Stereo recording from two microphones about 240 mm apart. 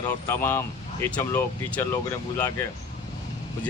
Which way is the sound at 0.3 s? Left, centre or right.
Centre.